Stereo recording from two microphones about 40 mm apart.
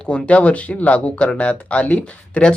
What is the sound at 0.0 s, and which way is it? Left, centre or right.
Speech, left.